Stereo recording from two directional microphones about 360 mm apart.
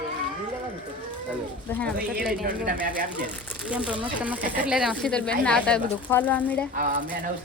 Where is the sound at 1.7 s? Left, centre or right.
Centre.